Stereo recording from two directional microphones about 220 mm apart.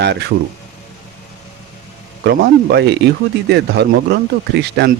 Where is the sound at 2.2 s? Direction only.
50° right (ahead or behind).